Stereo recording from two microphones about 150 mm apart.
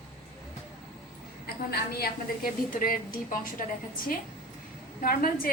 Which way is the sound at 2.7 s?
65° left (ahead or behind).